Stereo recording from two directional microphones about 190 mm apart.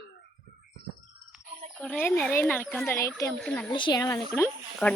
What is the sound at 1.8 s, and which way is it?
Speech, 5° left (ahead or behind).